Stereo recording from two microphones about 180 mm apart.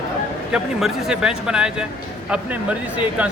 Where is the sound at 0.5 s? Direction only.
Centre (ahead or behind).